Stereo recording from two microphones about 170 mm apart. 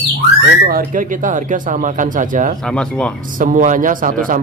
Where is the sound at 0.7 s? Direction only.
55° right (ahead or behind).